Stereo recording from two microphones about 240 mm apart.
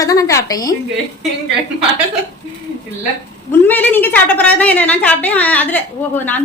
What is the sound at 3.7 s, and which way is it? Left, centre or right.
A woman's voice, centre.